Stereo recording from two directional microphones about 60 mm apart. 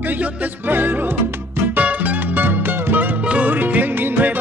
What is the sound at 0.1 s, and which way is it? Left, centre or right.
Music, right.